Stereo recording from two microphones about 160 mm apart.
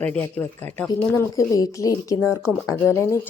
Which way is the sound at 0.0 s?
10° left (ahead or behind).